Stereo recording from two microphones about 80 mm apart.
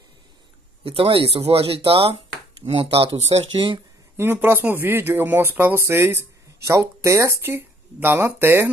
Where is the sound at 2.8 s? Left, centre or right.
Right.